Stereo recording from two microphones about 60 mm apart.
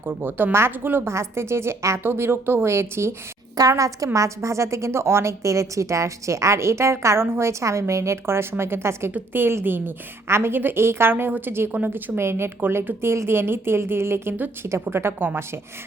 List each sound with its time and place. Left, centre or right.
0.0 s a woman's voice: right
1.1 s a woman's voice: right
3.7 s a woman's voice: right